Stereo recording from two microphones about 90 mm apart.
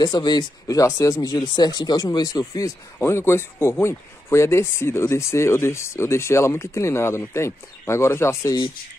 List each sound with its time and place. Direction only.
0.0 s speech: 50° left (ahead or behind); by 8.5 s 30° left (ahead or behind)